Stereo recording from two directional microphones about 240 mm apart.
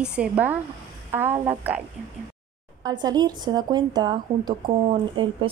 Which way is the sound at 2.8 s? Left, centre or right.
Centre.